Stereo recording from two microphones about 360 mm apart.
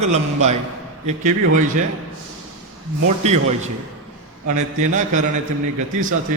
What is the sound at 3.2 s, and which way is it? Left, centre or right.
Speech, centre.